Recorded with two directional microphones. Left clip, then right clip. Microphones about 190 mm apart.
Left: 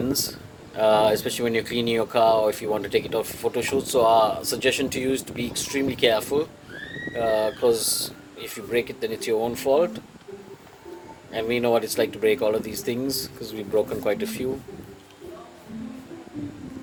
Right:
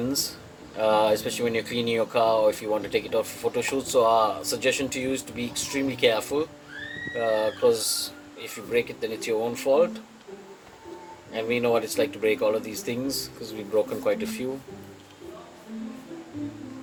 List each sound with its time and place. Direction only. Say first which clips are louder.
0.8 s speech: left 3 dB; 50° left (ahead or behind)
11.3 s speech: left 2 dB; 45° left (ahead or behind)